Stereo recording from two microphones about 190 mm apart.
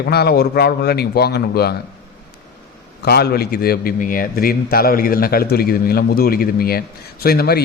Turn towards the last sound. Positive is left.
turn(degrees=55)  # may be behind; listen again after turning